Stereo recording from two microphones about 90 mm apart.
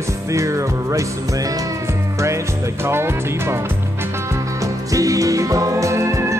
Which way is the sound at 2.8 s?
30° right (ahead or behind).